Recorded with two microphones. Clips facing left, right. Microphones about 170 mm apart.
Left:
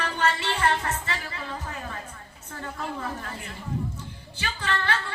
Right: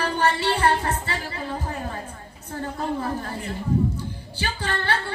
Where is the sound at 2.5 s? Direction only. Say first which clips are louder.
Right 6 dB; 35° right (ahead or behind).